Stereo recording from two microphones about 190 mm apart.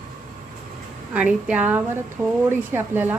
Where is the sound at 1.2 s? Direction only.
5° right (ahead or behind).